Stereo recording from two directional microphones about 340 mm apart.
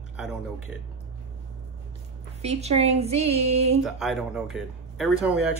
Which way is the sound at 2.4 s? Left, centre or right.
Centre.